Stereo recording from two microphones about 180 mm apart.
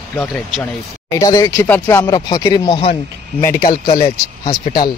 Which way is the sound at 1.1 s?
20° left (ahead or behind).